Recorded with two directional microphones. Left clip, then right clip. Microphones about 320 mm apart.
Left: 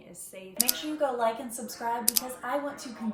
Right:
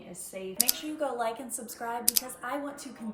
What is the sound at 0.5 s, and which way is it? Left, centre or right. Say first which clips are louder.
Speech: left 2 dB; centre.